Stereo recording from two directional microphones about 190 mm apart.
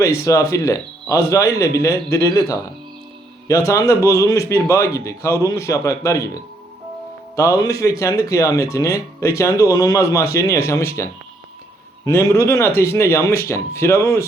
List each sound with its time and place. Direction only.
0.0 s speech: 15° left (ahead or behind)